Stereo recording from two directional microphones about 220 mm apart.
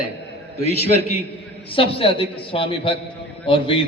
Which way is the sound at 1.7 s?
25° left (ahead or behind).